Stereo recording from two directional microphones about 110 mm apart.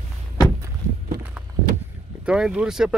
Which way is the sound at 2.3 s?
5° right (ahead or behind).